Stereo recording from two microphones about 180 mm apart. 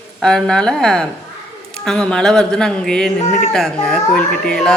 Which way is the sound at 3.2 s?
40° left (ahead or behind).